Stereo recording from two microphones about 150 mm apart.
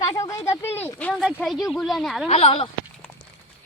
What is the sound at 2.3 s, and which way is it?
Speech, 40° left (ahead or behind).